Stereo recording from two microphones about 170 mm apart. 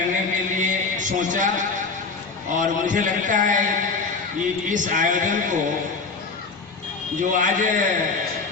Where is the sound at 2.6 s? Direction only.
50° right (ahead or behind).